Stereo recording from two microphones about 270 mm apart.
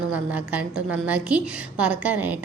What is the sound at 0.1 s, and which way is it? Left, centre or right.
A woman's voice, centre.